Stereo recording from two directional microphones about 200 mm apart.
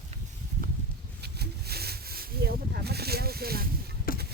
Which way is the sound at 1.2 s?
55° right (ahead or behind).